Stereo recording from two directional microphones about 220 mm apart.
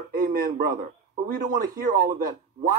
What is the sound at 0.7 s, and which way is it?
A man's voice, 40° right (ahead or behind).